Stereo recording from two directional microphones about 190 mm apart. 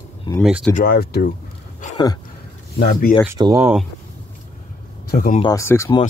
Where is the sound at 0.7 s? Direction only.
50° left (ahead or behind).